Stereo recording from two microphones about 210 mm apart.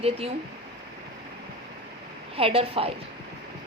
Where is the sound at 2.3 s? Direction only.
30° right (ahead or behind).